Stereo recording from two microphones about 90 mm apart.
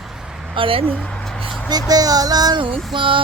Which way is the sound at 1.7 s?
45° right (ahead or behind).